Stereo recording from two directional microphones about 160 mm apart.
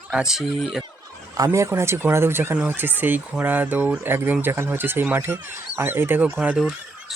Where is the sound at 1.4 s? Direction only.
20° right (ahead or behind).